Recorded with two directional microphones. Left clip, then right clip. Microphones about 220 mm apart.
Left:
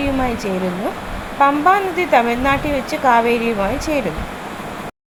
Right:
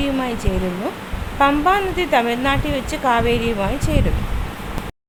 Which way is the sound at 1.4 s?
5° left (ahead or behind).